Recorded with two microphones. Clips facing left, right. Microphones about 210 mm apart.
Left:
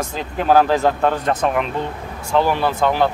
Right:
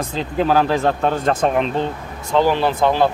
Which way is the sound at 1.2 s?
30° right (ahead or behind).